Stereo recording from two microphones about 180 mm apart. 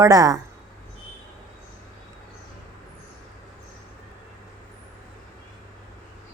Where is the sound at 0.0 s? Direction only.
20° right (ahead or behind).